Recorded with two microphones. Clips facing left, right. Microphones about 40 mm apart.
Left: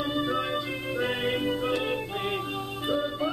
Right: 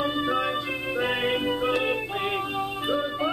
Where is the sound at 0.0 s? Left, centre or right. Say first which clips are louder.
Right 3 dB; centre.